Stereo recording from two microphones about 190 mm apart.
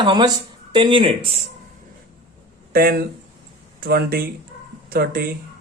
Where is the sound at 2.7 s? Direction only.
50° right (ahead or behind).